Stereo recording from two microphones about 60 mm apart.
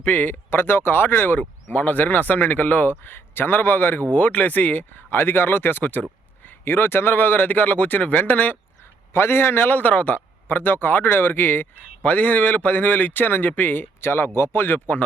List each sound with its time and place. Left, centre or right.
0.0 s speech: left
8.8 s a man's voice: left